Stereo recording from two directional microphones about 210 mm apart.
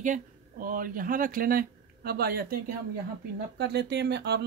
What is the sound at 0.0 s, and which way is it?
Speech, 40° right (ahead or behind).